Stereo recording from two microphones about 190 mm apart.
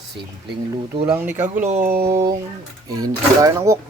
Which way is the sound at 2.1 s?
15° right (ahead or behind).